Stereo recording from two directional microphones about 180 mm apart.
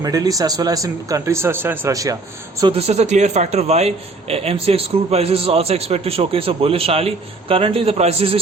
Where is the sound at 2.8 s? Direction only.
35° right (ahead or behind).